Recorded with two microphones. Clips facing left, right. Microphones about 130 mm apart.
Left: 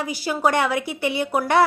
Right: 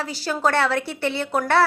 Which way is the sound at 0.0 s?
10° left (ahead or behind).